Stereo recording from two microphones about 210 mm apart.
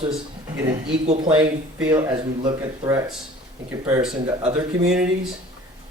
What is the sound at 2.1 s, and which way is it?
Speech, 20° right (ahead or behind).